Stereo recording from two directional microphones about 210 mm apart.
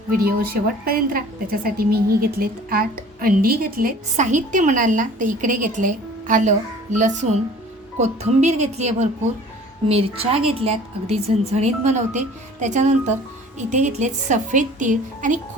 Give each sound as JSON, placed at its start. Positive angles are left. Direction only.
{"t": 0.2, "sound": "a woman's voice", "side_deg": -45}